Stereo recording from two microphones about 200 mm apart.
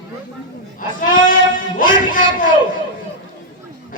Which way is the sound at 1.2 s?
40° left (ahead or behind).